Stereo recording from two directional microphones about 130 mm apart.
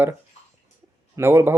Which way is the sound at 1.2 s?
20° right (ahead or behind).